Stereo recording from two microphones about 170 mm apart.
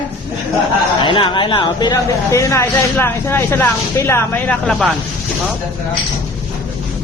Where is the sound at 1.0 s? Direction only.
30° left (ahead or behind); by 4.9 s 5° left (ahead or behind).